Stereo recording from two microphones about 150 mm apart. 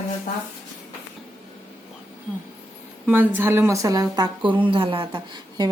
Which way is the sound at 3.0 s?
15° right (ahead or behind).